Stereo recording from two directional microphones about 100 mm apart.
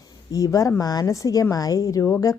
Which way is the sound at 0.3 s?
35° left (ahead or behind).